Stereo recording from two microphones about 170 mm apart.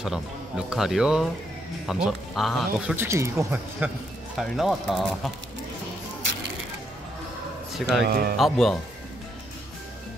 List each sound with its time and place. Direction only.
0.0 s speech: 5° right (ahead or behind)
3.0 s speech: 15° right (ahead or behind)
4.4 s speech: centre (ahead or behind)
8.0 s speech: 65° right (ahead or behind)
8.4 s speech: centre (ahead or behind)